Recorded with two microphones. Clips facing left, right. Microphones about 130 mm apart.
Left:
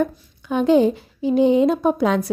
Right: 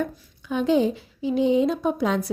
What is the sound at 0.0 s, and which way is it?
A woman's voice, 50° left (ahead or behind).